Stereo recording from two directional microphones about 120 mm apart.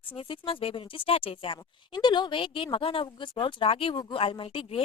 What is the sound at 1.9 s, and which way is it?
Speech, 40° left (ahead or behind).